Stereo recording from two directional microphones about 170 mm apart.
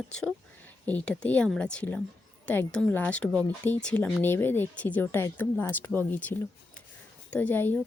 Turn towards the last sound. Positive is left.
turn(degrees=10)  # may be behind; listen again after turning